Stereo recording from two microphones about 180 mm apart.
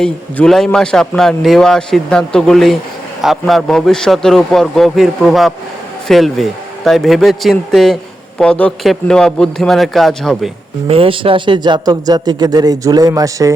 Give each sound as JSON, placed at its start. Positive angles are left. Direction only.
{"t": 0.0, "sound": "a man's voice", "side_deg": 5}
{"t": 10.8, "sound": "speech", "side_deg": -30}